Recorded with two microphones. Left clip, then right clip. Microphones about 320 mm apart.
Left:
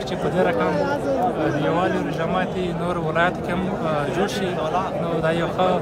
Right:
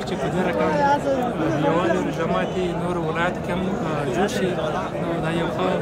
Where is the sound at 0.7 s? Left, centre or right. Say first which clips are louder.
Right 4 dB; right.